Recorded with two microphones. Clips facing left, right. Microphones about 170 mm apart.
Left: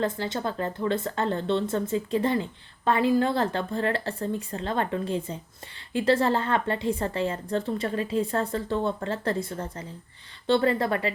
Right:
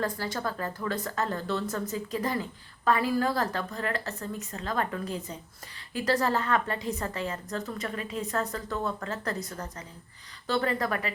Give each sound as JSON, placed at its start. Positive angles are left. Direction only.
{"t": 0.0, "sound": "a woman's voice", "side_deg": 25}